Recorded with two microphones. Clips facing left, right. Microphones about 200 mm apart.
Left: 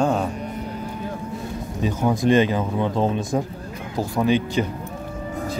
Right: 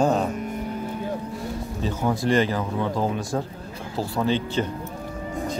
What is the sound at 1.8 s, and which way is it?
Speech, 15° left (ahead or behind).